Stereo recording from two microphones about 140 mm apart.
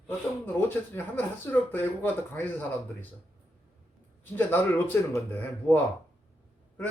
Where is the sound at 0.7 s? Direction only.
15° left (ahead or behind).